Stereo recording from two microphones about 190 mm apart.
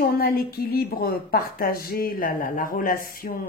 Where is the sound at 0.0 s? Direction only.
55° left (ahead or behind).